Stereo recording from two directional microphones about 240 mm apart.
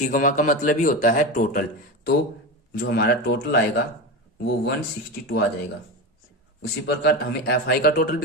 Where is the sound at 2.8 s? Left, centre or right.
Left.